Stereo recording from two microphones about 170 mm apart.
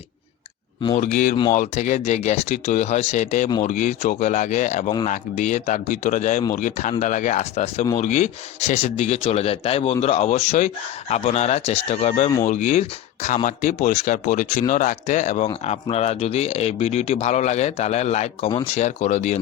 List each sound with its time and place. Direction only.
0.9 s speech: 45° left (ahead or behind)